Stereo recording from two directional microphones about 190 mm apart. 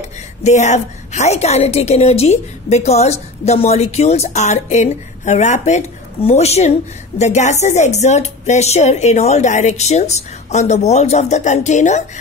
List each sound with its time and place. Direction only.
0.4 s a woman's voice: 35° left (ahead or behind)